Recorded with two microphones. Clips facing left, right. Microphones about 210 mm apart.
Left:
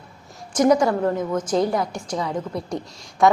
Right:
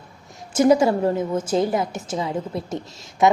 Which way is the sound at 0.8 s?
25° right (ahead or behind).